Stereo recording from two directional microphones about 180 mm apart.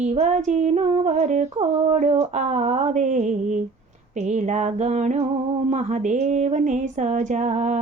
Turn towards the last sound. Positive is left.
turn(degrees=-40)  # may be behind; listen again after turning